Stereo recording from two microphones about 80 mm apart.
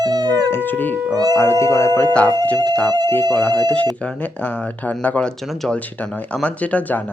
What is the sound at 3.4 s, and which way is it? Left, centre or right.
Speech, left.